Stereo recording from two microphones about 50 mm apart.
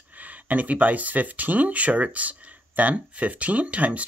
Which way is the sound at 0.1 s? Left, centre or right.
Right.